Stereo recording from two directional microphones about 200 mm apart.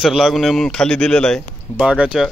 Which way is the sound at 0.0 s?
Centre (ahead or behind).